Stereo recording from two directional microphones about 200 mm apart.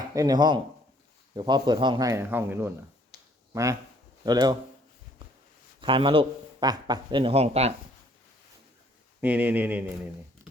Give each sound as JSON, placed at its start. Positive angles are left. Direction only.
{"t": 0.1, "sound": "speech", "side_deg": -20}
{"t": 5.8, "sound": "speech", "side_deg": -25}
{"t": 9.2, "sound": "speech", "side_deg": -10}